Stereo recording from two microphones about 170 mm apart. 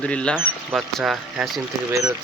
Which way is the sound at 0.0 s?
5° left (ahead or behind).